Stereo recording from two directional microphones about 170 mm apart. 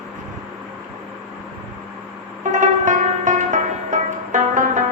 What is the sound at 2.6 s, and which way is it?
Music, 45° right (ahead or behind).